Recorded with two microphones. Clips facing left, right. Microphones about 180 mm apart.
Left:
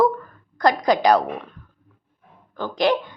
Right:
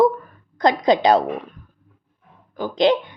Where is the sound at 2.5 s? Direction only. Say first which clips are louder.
Right 3 dB; 15° right (ahead or behind).